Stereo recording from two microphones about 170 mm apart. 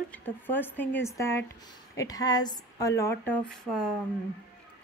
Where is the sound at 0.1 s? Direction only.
10° left (ahead or behind).